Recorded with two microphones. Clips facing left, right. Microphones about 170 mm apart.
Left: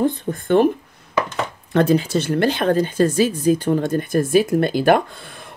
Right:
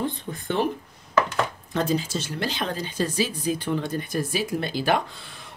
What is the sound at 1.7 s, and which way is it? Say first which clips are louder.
Speech: left 12 dB; 60° left (ahead or behind).